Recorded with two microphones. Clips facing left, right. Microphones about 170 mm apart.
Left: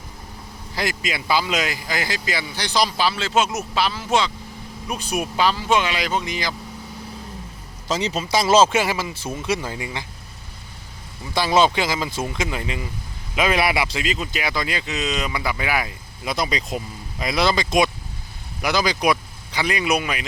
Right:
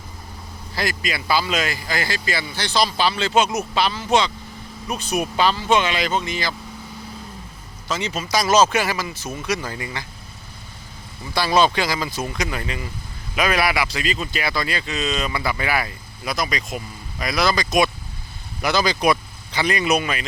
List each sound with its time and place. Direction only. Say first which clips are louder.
0.8 s speech: even; 20° left (ahead or behind)
7.9 s speech: left 2 dB; 30° left (ahead or behind); by 10.1 s 15° left (ahead or behind)
11.3 s speech: even; 20° left (ahead or behind)
16.3 s speech: left 1 dB; 30° left (ahead or behind); by 20.2 s 10° left (ahead or behind)